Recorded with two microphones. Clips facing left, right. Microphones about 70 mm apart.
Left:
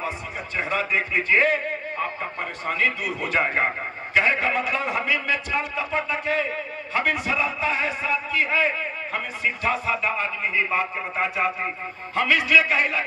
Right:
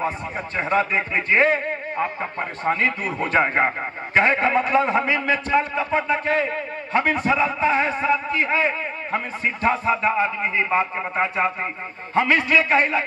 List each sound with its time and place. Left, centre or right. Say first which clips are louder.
0.6 s a man's voice: right 4 dB; right